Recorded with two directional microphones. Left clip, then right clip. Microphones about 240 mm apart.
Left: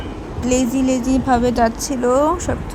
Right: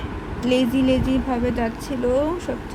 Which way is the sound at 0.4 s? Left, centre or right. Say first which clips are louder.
Left 2 dB; centre.